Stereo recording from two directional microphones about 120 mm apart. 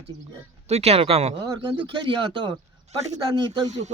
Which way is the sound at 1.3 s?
35° right (ahead or behind).